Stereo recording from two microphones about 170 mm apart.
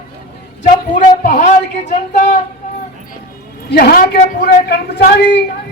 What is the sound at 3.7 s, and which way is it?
Speech, 65° left (ahead or behind).